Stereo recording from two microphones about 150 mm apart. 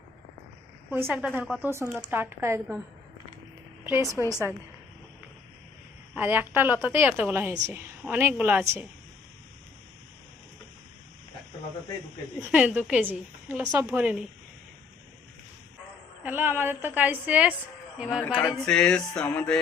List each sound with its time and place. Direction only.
0.9 s a woman's voice: 10° right (ahead or behind)
3.8 s a woman's voice: 15° right (ahead or behind)
4.2 s music: 15° left (ahead or behind)
6.1 s a woman's voice: 10° right (ahead or behind)
12.4 s a woman's voice: 5° right (ahead or behind)
16.2 s a woman's voice: 15° right (ahead or behind)
18.2 s male singing: 5° left (ahead or behind)
18.5 s music: 5° left (ahead or behind)